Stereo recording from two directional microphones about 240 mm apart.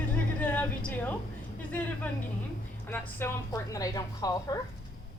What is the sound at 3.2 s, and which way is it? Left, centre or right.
Speech, centre.